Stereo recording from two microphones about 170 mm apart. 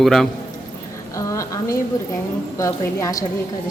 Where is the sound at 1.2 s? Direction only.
20° left (ahead or behind).